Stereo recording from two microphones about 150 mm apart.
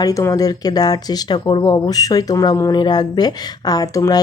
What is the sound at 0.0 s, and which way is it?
Speech, 20° left (ahead or behind).